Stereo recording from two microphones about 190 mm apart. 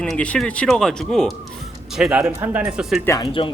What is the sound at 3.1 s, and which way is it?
Speech, 25° left (ahead or behind).